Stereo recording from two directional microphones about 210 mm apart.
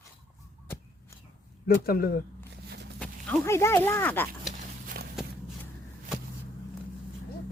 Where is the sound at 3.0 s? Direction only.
5° left (ahead or behind).